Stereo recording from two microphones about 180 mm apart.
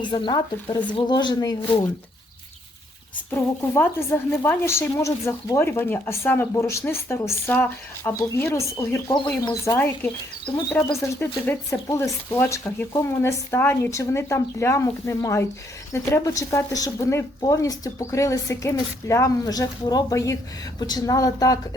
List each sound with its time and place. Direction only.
0.0 s speech: 25° left (ahead or behind)
4.3 s speech: 15° left (ahead or behind)
9.7 s speech: 10° left (ahead or behind)